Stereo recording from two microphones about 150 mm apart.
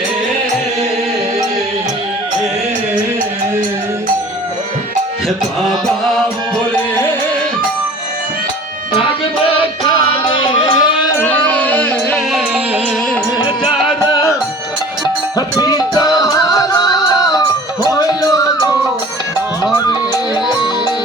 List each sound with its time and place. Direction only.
9.5 s music: 35° left (ahead or behind)
11.2 s music: 10° left (ahead or behind)
12.3 s music: 5° right (ahead or behind)
14.0 s music: 25° left (ahead or behind)
15.4 s music: 25° left (ahead or behind)
19.7 s music: 30° left (ahead or behind)